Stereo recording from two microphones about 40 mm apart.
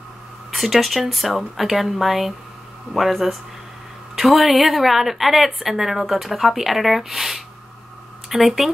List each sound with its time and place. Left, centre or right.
0.5 s a woman's voice: centre